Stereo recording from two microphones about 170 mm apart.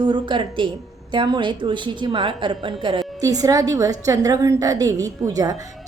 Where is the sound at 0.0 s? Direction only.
30° right (ahead or behind).